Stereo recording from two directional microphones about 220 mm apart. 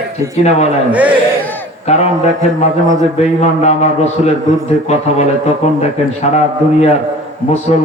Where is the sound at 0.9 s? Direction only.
5° right (ahead or behind).